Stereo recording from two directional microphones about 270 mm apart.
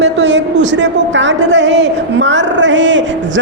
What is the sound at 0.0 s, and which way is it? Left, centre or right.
A man's voice, right.